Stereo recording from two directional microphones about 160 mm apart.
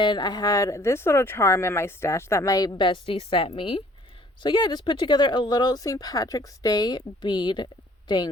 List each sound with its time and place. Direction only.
0.0 s speech: 30° left (ahead or behind)